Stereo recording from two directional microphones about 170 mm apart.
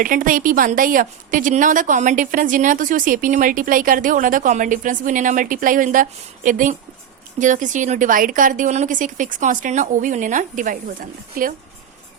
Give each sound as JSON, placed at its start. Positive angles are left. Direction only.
{"t": 0.0, "sound": "a woman's voice", "side_deg": -55}